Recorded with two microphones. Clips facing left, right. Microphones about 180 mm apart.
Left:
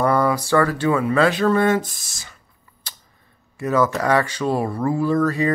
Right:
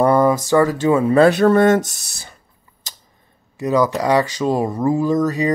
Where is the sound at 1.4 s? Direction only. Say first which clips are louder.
Right 5 dB; 50° right (ahead or behind).